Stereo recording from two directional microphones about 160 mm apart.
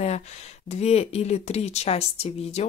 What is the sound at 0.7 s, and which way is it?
Speech, 40° left (ahead or behind).